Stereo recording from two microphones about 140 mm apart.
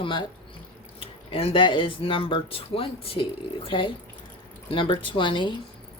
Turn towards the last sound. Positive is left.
turn(degrees=35)  # may be behind; listen again after turning